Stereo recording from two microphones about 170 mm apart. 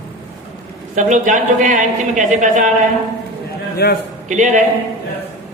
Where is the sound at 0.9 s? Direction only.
45° right (ahead or behind).